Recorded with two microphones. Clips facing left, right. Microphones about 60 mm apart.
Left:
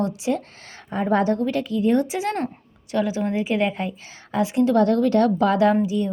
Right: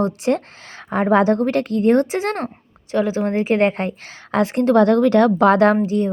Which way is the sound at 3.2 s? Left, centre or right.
Right.